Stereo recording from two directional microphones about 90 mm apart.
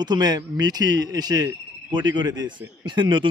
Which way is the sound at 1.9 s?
60° right (ahead or behind).